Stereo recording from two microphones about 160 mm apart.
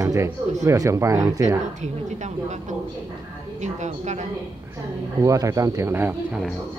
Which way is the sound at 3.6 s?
45° right (ahead or behind).